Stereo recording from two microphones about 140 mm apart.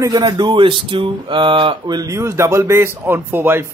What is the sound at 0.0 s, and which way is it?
Speech, 25° right (ahead or behind).